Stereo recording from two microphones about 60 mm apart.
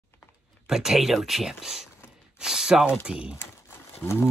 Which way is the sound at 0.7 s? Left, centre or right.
Centre.